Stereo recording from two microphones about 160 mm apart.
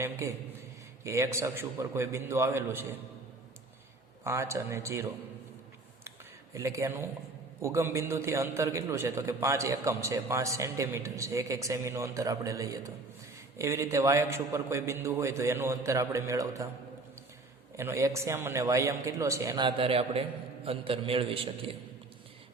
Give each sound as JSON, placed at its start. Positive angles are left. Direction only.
{"t": 0.0, "sound": "a sound", "side_deg": -20}
{"t": 1.0, "sound": "a man's voice", "side_deg": -15}
{"t": 4.2, "sound": "a man's voice", "side_deg": -15}
{"t": 6.1, "sound": "a sound", "side_deg": -20}
{"t": 7.6, "sound": "a man's voice", "side_deg": -15}
{"t": 17.7, "sound": "a man's voice", "side_deg": -15}